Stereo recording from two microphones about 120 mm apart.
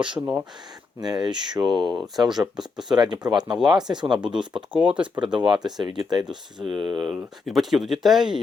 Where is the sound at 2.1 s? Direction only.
35° right (ahead or behind).